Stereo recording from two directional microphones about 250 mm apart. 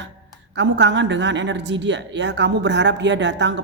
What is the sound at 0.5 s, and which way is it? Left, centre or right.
A woman's voice, right.